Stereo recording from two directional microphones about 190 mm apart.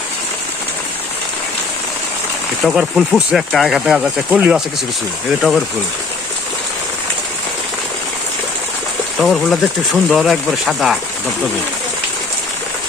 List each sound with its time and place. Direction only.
2.6 s speech: centre (ahead or behind)
9.1 s speech: centre (ahead or behind)